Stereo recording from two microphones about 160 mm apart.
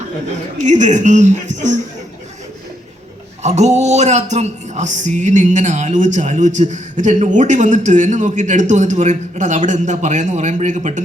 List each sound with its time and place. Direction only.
0.6 s speech: 50° right (ahead or behind)
3.4 s speech: 45° right (ahead or behind)